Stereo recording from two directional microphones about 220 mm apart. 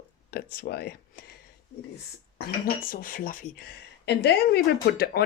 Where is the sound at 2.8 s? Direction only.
40° left (ahead or behind).